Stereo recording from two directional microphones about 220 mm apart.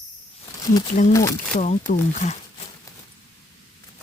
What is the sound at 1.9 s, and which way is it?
Speech, 35° left (ahead or behind).